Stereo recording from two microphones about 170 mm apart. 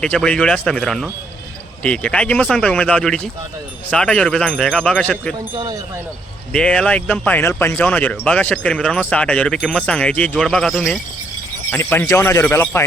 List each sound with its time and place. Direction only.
0.0 s speech: 5° left (ahead or behind)
5.5 s speech: 25° right (ahead or behind)
6.5 s speech: 5° left (ahead or behind)
11.7 s speech: 15° left (ahead or behind)